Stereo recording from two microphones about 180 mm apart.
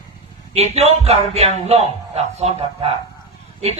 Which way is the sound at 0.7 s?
35° right (ahead or behind).